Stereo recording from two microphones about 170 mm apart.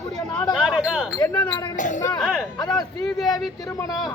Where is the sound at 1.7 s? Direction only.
50° left (ahead or behind).